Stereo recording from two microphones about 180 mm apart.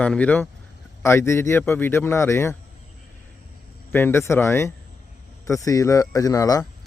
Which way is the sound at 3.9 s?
15° left (ahead or behind).